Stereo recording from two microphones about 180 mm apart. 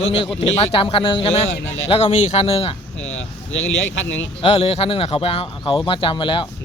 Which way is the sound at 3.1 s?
90° left.